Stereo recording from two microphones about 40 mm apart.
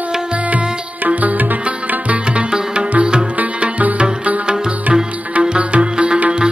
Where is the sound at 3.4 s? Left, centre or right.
Right.